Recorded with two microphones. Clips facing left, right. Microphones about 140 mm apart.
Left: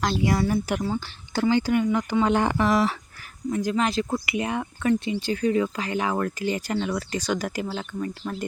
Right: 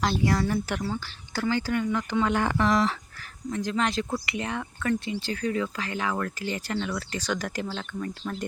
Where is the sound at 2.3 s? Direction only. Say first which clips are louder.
Left 5 dB; 25° left (ahead or behind).